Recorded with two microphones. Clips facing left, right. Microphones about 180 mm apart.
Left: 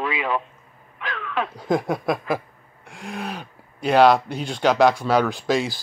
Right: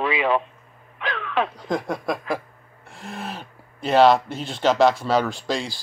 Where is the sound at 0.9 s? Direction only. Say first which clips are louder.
Right 3 dB; 25° right (ahead or behind).